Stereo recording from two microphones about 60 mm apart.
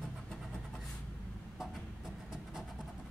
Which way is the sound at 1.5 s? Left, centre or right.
Centre.